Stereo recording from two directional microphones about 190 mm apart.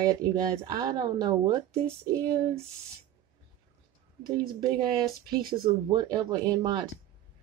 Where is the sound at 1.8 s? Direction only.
15° right (ahead or behind).